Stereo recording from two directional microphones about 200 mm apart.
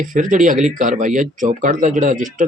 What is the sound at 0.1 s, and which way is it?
Speech, 40° right (ahead or behind).